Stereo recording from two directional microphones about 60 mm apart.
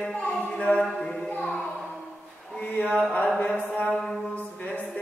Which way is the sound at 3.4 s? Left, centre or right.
Left.